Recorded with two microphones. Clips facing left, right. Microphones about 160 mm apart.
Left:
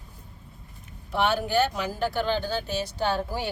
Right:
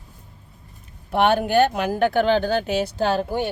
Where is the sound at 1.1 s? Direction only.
60° right (ahead or behind); by 3.3 s 75° right (ahead or behind).